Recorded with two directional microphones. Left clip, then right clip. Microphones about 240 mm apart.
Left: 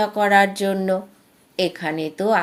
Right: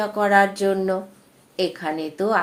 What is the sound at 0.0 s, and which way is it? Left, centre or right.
Speech, left.